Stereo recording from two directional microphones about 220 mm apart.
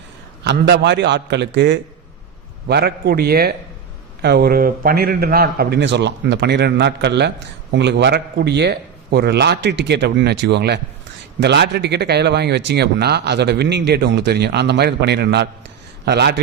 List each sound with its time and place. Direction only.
0.4 s a man's voice: 50° right (ahead or behind)